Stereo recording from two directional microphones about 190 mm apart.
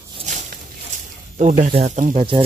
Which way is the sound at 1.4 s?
40° right (ahead or behind).